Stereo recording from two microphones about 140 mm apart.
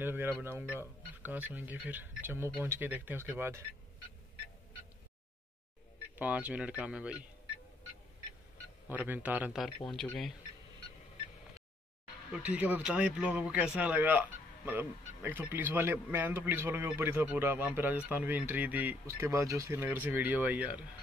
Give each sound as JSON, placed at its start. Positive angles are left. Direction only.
{"t": 0.0, "sound": "speech", "side_deg": -15}
{"t": 6.1, "sound": "speech", "side_deg": -10}
{"t": 8.8, "sound": "speech", "side_deg": -15}
{"t": 12.3, "sound": "speech", "side_deg": -10}